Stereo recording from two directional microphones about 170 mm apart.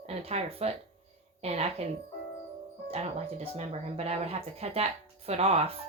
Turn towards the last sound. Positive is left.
turn(degrees=-35)  # may be behind; listen again after turning